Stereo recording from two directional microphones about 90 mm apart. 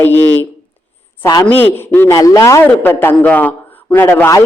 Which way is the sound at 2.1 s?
40° left (ahead or behind).